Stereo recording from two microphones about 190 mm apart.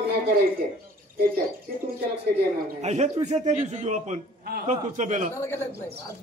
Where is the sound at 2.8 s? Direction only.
35° right (ahead or behind).